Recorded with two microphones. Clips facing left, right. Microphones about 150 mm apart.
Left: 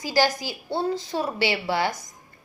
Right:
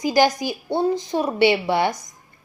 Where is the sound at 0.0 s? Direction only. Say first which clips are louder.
Right 5 dB; 15° right (ahead or behind).